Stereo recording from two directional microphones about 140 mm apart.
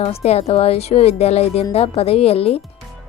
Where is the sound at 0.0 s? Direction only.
50° left (ahead or behind).